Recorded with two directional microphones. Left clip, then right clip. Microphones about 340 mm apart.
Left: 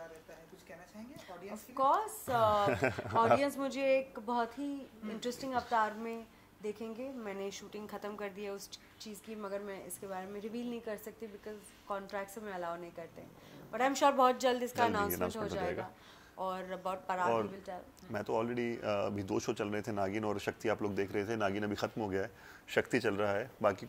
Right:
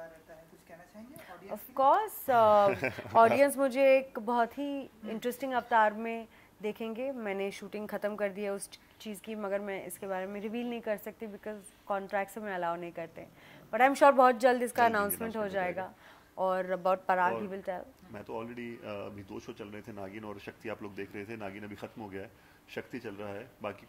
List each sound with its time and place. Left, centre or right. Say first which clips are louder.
1.8 s speech: right 5 dB; right
2.6 s speech: right 4 dB; centre
3.3 s a woman's voice: right 8 dB; right
16.3 s a woman's voice: right 8 dB; right
18.1 s speech: left 6 dB; left